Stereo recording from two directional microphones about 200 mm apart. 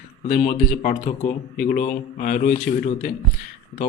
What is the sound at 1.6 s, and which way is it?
A man's voice, 40° left (ahead or behind).